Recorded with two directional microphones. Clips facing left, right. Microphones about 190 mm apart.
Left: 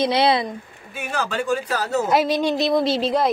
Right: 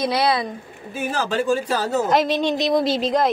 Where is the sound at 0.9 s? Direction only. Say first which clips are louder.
Right 3 dB; 35° right (ahead or behind).